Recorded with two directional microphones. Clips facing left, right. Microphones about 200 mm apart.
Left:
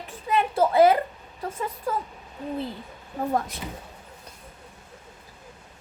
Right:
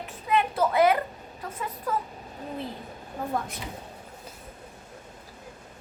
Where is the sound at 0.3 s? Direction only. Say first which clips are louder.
Left 2 dB; 30° left (ahead or behind).